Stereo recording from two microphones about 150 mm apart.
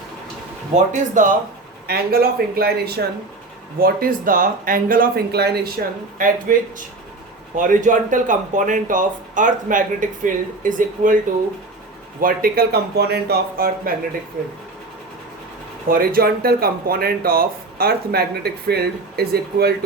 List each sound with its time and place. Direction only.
1.1 s speech: 60° right (ahead or behind)
1.9 s speech: 90° right
3.8 s speech: 75° right (ahead or behind)
5.8 s speech: 75° right (ahead or behind)
7.5 s speech: 60° right (ahead or behind)
12.2 s speech: 80° right
15.9 s speech: 80° right